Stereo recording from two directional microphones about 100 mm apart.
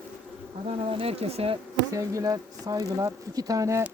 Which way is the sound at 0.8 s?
75° right (ahead or behind).